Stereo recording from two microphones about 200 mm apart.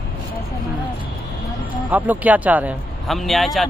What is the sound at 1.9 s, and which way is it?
Speech, 10° right (ahead or behind).